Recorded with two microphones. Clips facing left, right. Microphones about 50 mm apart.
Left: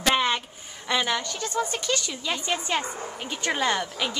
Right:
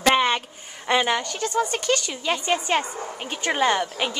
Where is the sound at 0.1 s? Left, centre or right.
Right.